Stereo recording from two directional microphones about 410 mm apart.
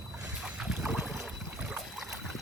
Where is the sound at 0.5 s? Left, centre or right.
Centre.